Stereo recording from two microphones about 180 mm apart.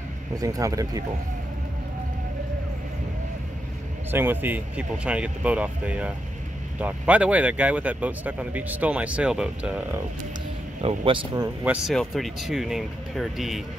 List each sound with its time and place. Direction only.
0.4 s speech: 20° right (ahead or behind)
4.1 s speech: 10° right (ahead or behind)
10.8 s speech: 30° right (ahead or behind)
11.6 s speech: 5° right (ahead or behind)